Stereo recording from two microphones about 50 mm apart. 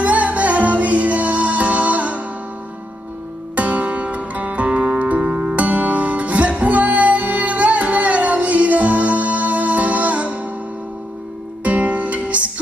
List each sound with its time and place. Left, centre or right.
0.0 s music: right
3.5 s music: right
11.6 s music: right